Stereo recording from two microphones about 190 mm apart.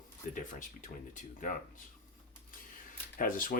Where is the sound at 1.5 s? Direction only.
40° left (ahead or behind).